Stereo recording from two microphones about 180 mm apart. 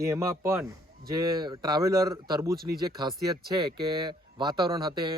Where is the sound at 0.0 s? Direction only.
15° right (ahead or behind).